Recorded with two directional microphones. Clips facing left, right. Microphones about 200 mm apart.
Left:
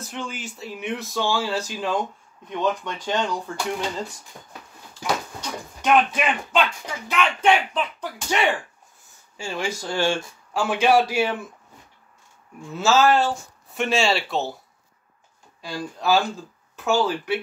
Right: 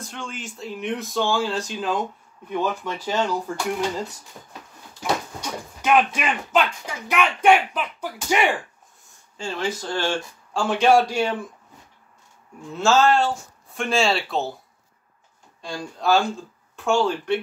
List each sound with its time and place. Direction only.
0.0 s a child's voice: 5° left (ahead or behind)
5.4 s a child's voice: 5° right (ahead or behind)
9.4 s speech: 10° left (ahead or behind)
12.7 s speech: 5° left (ahead or behind)
15.6 s speech: 5° left (ahead or behind)